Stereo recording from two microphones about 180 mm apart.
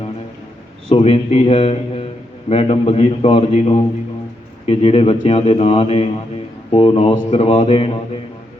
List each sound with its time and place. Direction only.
0.9 s speech: 30° left (ahead or behind)